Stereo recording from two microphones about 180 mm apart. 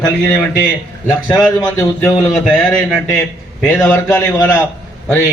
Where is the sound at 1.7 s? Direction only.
10° left (ahead or behind).